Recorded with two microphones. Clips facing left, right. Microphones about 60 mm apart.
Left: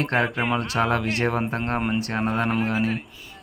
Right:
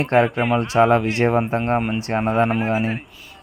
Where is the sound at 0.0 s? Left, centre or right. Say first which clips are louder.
Right 6 dB; right.